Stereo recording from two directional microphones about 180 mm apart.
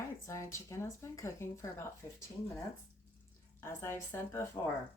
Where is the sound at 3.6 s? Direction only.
15° left (ahead or behind).